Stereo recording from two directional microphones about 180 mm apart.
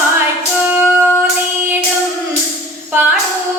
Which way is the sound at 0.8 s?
5° left (ahead or behind).